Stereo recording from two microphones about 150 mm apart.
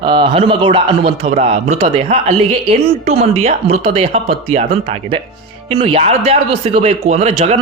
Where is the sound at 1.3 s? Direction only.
45° right (ahead or behind).